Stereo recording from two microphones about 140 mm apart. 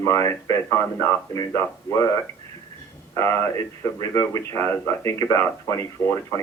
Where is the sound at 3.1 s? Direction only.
20° left (ahead or behind).